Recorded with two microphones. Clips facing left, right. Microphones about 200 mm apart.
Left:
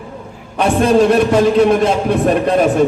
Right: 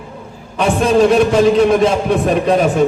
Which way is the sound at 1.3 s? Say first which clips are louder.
Even; 55° left (ahead or behind).